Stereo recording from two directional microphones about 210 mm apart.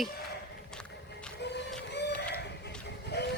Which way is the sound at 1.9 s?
55° left (ahead or behind).